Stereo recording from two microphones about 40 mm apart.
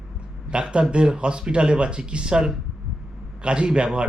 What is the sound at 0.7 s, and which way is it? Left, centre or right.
Speech, right.